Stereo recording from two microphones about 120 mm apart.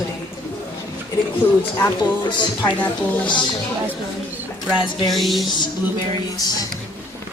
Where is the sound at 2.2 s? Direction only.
40° left (ahead or behind).